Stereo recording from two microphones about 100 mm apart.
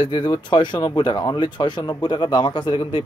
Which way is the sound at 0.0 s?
50° left (ahead or behind).